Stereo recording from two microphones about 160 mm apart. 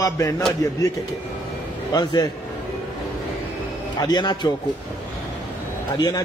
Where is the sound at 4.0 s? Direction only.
25° left (ahead or behind).